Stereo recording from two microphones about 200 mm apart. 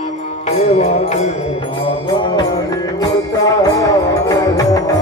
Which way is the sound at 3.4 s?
15° left (ahead or behind).